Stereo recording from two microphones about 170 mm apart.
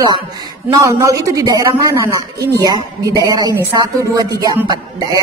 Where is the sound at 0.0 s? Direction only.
25° right (ahead or behind).